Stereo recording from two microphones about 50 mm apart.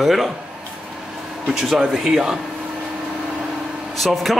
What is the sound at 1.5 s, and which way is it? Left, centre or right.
Speech, centre.